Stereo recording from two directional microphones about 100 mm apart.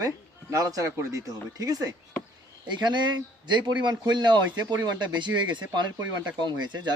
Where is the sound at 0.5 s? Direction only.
35° right (ahead or behind).